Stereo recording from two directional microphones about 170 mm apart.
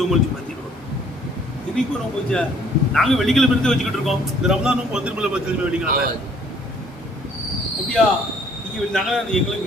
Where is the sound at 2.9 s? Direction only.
Centre (ahead or behind).